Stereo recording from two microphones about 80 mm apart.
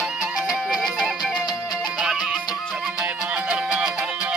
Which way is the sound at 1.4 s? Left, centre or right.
Left.